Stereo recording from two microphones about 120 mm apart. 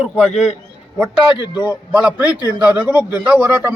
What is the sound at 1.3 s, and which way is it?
Speech, 40° left (ahead or behind).